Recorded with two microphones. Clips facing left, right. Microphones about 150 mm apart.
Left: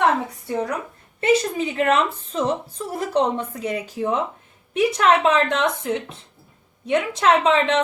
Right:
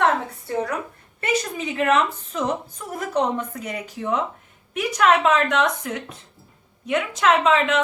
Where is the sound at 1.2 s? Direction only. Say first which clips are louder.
Left 6 dB; 30° left (ahead or behind).